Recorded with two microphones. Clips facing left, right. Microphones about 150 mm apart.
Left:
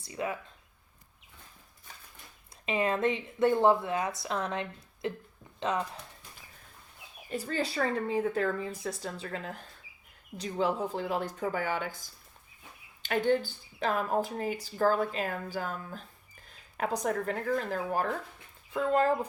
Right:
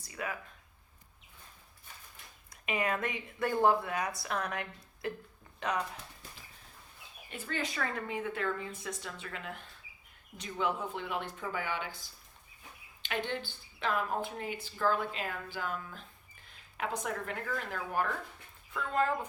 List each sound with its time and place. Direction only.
0.0 s speech: 25° left (ahead or behind)
2.6 s speech: 25° left (ahead or behind)
7.3 s speech: 35° left (ahead or behind)